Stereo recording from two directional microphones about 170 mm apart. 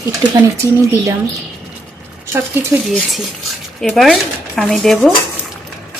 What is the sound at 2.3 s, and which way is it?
Speech, 15° right (ahead or behind).